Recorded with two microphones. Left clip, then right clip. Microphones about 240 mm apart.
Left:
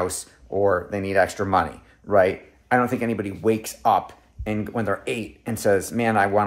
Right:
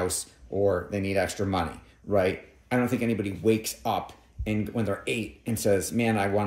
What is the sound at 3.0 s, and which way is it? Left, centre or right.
Speech, centre.